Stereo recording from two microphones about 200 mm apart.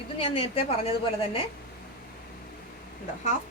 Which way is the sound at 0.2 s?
25° left (ahead or behind).